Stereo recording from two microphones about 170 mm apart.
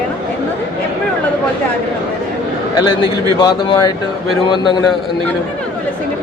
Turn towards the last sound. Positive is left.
turn(degrees=25)  # may be behind; listen again after turning